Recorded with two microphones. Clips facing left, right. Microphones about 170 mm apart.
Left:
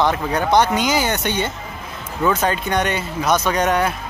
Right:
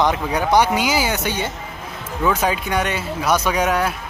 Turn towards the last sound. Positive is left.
turn(degrees=-5)  # may be behind; listen again after turning